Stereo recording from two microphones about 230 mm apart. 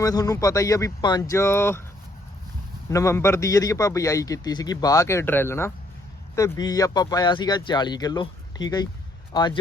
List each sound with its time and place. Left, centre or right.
0.0 s a man's voice: centre
2.9 s a man's voice: centre